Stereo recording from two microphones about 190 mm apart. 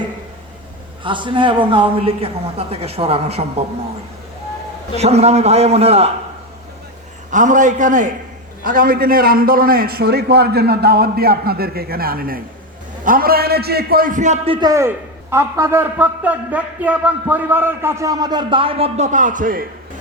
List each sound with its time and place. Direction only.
1.0 s a man's voice: 25° right (ahead or behind)
4.9 s a man's voice: 35° right (ahead or behind)
7.3 s a man's voice: 40° right (ahead or behind)
14.7 s a man's voice: 15° right (ahead or behind); by 19.6 s 45° right (ahead or behind)